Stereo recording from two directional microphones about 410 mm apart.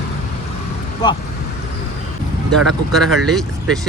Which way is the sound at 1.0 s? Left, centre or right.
Centre.